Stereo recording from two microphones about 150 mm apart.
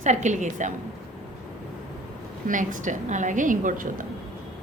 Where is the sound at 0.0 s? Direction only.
50° right (ahead or behind).